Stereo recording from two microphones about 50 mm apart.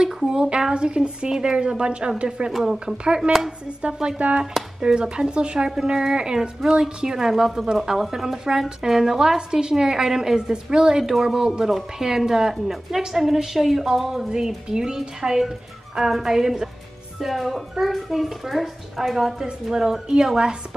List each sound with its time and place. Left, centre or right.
0.0 s a woman's voice: centre
2.5 s a woman's voice: centre
3.8 s a woman's voice: centre